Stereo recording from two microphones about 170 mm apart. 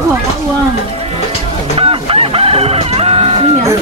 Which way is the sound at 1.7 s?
35° right (ahead or behind).